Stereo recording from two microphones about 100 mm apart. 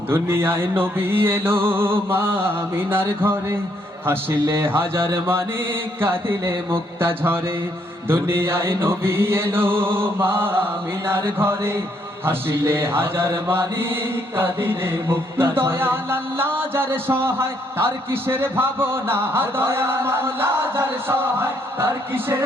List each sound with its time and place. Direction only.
0.1 s mantra: 25° right (ahead or behind)